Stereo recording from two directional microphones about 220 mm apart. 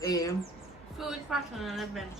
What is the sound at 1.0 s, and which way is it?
A woman's voice, centre (ahead or behind).